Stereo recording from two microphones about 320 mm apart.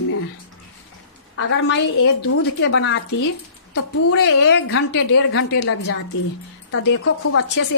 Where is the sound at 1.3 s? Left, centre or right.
Left.